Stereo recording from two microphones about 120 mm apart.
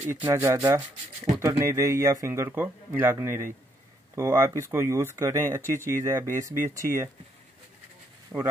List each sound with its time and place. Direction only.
0.3 s speech: 20° right (ahead or behind)
8.3 s speech: 10° right (ahead or behind)